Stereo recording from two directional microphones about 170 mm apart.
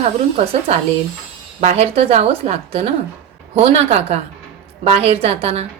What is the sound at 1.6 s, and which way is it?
A woman's voice, 35° right (ahead or behind).